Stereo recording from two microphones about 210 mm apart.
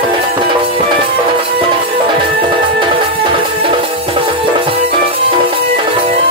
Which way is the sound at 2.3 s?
25° right (ahead or behind).